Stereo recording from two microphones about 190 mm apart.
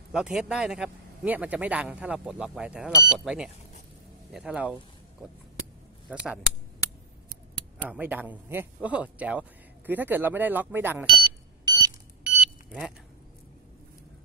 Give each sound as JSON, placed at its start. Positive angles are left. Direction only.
{"t": 0.1, "sound": "speech", "side_deg": -5}
{"t": 6.0, "sound": "speech", "side_deg": -5}
{"t": 7.9, "sound": "speech", "side_deg": -10}
{"t": 11.1, "sound": "alarm", "side_deg": -25}
{"t": 12.2, "sound": "a sound", "side_deg": -5}